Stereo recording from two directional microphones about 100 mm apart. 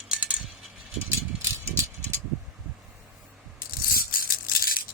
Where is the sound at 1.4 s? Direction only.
30° right (ahead or behind).